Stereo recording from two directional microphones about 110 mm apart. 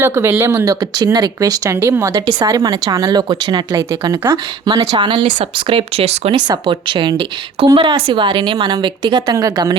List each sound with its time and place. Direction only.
0.0 s speech: 20° right (ahead or behind)
0.8 s speech: 40° right (ahead or behind)
4.2 s speech: 30° right (ahead or behind)
4.9 s a woman's voice: 45° right (ahead or behind); by 6.3 s 70° right (ahead or behind)
6.3 s a woman's voice: 45° right (ahead or behind)